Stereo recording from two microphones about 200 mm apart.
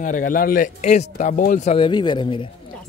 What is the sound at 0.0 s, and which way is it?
Speech, 40° left (ahead or behind).